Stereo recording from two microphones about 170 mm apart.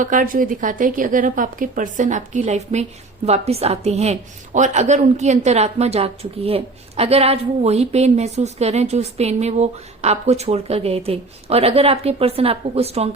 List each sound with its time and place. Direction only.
0.0 s a woman's voice: 50° right (ahead or behind)